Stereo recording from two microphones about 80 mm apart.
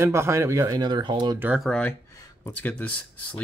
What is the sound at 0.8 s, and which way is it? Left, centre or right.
Speech, right.